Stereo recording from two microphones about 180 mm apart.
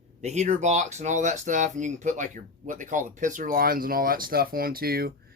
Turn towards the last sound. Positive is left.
turn(degrees=-55)  # may be behind; listen again after turning